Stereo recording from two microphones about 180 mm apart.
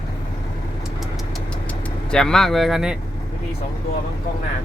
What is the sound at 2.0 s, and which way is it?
Speech, 5° left (ahead or behind).